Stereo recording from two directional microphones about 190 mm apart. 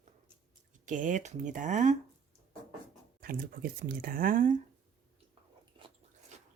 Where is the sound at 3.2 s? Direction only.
50° right (ahead or behind).